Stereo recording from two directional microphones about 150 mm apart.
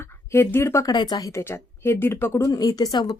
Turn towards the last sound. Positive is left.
turn(degrees=25)  # may be behind; listen again after turning